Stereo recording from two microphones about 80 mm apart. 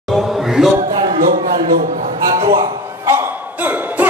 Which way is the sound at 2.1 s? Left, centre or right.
Right.